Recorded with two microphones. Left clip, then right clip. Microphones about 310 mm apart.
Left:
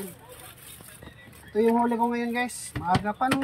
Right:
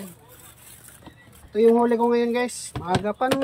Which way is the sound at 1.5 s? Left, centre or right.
Centre.